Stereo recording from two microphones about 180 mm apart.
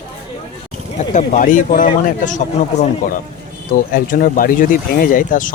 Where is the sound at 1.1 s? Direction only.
45° left (ahead or behind).